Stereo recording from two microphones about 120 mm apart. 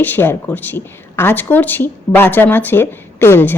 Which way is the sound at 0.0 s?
15° left (ahead or behind).